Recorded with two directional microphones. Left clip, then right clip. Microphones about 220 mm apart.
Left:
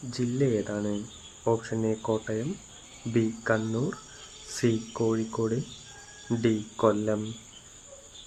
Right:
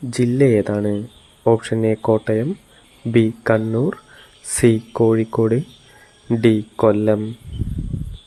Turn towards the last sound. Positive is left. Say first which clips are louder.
# right 10 dB
turn(degrees=-30)  # may be behind; listen again after turning